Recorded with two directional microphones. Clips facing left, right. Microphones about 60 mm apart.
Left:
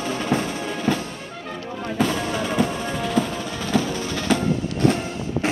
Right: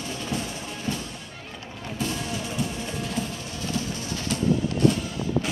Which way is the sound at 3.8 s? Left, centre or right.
Left.